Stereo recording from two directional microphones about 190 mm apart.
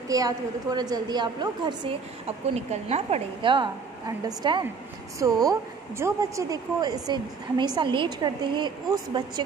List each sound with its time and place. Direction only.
0.1 s speech: 20° right (ahead or behind)